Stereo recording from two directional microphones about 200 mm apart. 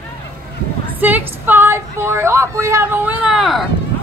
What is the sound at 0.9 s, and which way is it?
Speech, 10° right (ahead or behind).